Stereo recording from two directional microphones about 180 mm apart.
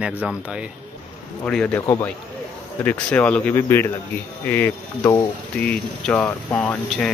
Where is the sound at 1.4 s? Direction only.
5° left (ahead or behind).